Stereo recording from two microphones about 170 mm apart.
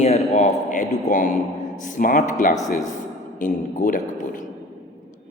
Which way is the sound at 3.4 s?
50° left (ahead or behind).